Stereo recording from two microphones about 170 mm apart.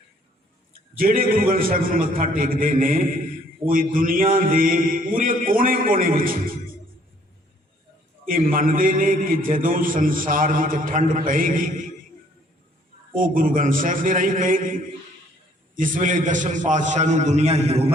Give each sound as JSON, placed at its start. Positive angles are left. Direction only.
{"t": 0.7, "sound": "a man's voice", "side_deg": -55}
{"t": 8.2, "sound": "a man's voice", "side_deg": -55}
{"t": 13.1, "sound": "a man's voice", "side_deg": -55}